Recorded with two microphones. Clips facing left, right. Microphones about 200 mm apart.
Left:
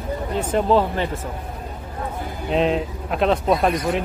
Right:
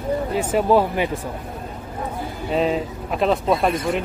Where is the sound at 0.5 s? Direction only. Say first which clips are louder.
Right 1 dB; 10° right (ahead or behind).